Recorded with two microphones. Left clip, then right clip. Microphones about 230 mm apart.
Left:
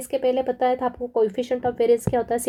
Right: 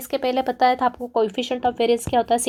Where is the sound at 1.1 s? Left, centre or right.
Centre.